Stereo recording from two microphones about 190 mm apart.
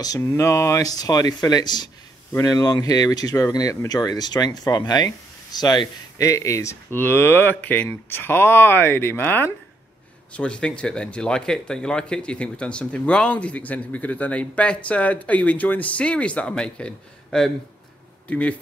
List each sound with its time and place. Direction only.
0.0 s speech: 15° left (ahead or behind)